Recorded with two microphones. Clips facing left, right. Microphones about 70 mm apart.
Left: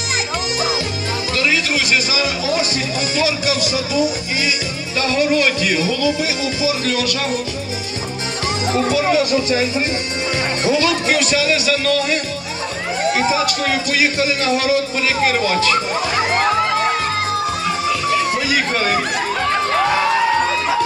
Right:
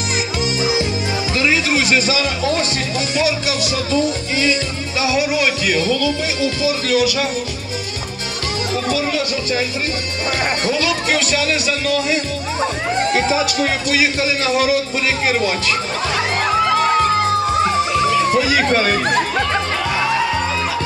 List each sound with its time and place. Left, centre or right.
1.3 s music: right
2.0 s speech: centre
3.7 s speech: centre
5.0 s music: centre
5.8 s speech: centre
6.9 s speech: centre
9.2 s speech: centre
10.6 s speech: centre
13.9 s speech: centre
18.3 s music: centre